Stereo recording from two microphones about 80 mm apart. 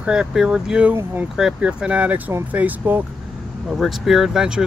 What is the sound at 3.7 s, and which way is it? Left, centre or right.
Speech, centre.